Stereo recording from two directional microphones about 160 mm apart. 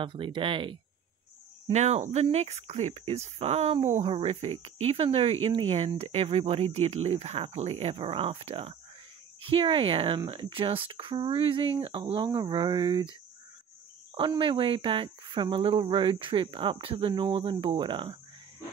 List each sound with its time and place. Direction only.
0.0 s speech: 30° right (ahead or behind)
1.7 s speech: 45° right (ahead or behind); by 13.1 s 25° right (ahead or behind)
14.1 s speech: 30° right (ahead or behind)